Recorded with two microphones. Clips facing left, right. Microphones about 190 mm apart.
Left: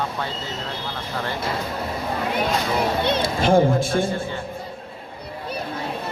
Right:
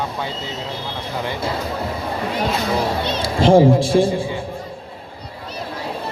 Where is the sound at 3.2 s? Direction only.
30° right (ahead or behind).